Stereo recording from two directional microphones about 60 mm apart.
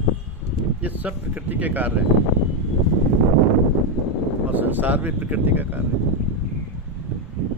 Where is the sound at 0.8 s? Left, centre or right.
Right.